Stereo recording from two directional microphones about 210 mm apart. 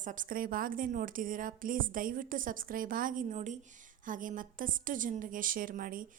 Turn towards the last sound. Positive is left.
turn(degrees=-40)  # may be behind; listen again after turning